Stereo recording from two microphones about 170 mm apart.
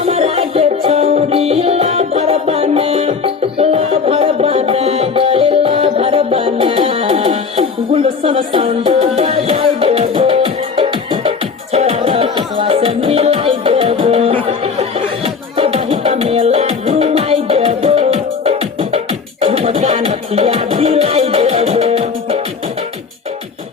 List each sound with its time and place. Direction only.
0.0 s music: 35° right (ahead or behind)